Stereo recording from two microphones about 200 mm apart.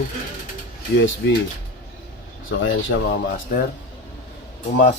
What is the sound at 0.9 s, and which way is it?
Speech, 65° left (ahead or behind).